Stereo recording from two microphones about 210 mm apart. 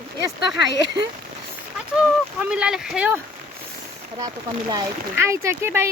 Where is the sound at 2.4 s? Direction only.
5° right (ahead or behind).